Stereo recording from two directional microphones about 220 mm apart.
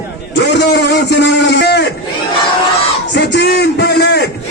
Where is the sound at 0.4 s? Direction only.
50° left (ahead or behind).